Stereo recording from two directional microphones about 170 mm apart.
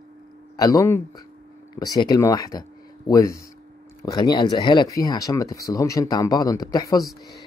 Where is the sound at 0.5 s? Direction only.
20° left (ahead or behind).